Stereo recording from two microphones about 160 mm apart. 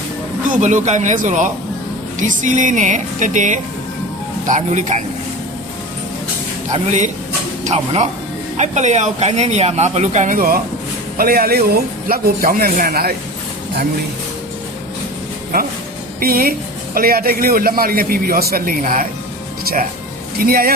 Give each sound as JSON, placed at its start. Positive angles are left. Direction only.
{"t": 0.4, "sound": "speech", "side_deg": -50}
{"t": 7.6, "sound": "a man's voice", "side_deg": -45}
{"t": 16.2, "sound": "a man's voice", "side_deg": -65}